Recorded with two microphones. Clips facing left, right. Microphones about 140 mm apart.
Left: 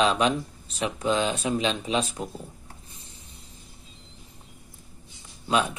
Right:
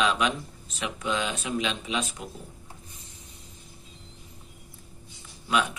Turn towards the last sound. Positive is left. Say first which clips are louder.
# left 2 dB
turn(degrees=30)  # may be behind; listen again after turning